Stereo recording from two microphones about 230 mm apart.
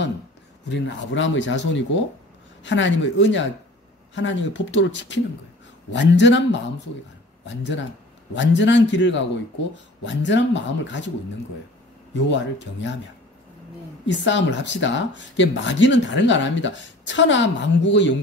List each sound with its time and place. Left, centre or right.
0.7 s speech: left
7.4 s speech: left
12.1 s speech: left
14.0 s speech: left